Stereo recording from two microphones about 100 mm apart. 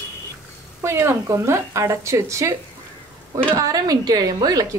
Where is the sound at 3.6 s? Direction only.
35° right (ahead or behind).